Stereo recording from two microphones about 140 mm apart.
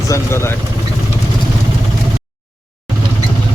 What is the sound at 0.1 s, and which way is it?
Speech, 20° left (ahead or behind).